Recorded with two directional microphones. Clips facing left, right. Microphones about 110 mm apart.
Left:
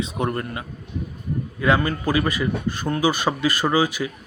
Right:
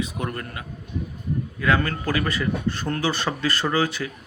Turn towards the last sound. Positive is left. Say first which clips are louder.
# left 3 dB
turn(degrees=10)  # may be behind; listen again after turning